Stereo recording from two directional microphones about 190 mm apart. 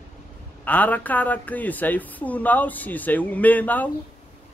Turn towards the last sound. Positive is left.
turn(degrees=10)  # may be behind; listen again after turning